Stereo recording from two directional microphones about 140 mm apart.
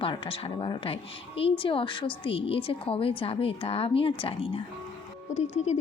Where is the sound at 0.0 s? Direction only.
40° left (ahead or behind).